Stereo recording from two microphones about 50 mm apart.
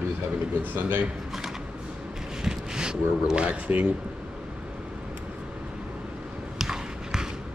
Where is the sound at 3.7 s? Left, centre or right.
Right.